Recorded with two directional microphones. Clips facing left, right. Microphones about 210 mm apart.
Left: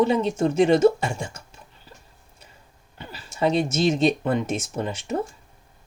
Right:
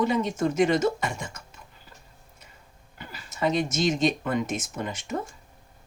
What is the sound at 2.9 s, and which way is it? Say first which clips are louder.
Speech: left 5 dB; 30° left (ahead or behind).